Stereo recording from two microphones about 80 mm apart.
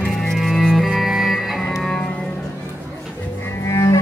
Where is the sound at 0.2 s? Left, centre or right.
Centre.